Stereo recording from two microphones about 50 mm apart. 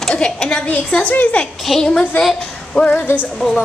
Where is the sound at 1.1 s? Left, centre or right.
Left.